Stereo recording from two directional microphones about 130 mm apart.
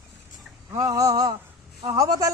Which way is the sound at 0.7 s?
25° right (ahead or behind).